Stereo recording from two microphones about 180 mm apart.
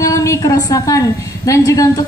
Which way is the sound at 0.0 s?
15° left (ahead or behind).